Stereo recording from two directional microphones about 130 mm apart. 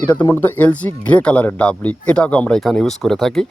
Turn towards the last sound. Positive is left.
turn(degrees=0)  # may be behind; listen again after turning